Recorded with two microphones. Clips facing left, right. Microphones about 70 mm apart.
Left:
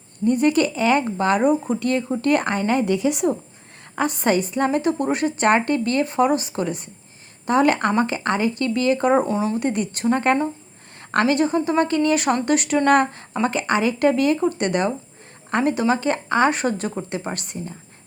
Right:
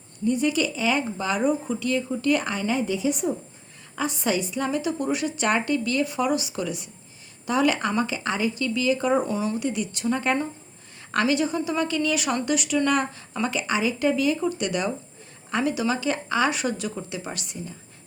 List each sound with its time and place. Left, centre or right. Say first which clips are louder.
0.3 s a woman's voice: left 5 dB; left
3.9 s a woman's voice: left 5 dB; left
9.6 s a woman's voice: left 5 dB; left